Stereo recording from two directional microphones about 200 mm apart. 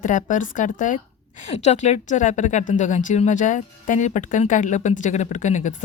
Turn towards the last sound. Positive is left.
turn(degrees=40)  # may be behind; listen again after turning